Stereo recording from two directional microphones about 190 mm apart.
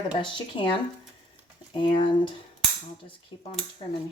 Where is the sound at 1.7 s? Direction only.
25° left (ahead or behind).